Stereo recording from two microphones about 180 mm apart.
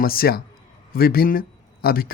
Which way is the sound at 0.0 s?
55° left (ahead or behind).